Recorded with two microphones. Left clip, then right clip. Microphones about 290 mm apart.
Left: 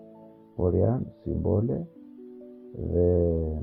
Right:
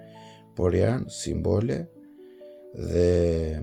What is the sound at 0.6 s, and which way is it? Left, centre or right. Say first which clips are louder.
Speech: right 2 dB; right.